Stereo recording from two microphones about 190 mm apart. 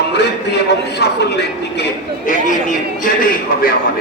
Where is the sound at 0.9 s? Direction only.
60° left (ahead or behind).